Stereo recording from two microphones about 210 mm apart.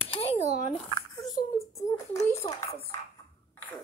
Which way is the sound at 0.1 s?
30° left (ahead or behind).